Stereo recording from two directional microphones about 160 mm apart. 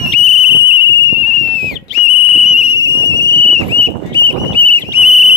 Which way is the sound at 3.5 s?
40° right (ahead or behind).